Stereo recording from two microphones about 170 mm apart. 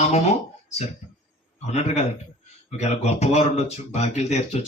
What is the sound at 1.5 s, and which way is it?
Speech, 40° left (ahead or behind).